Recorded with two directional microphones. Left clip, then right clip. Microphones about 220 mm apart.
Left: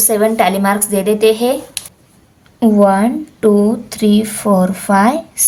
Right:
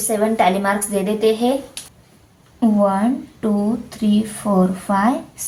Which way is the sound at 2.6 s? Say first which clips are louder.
Left 6 dB; 60° left (ahead or behind).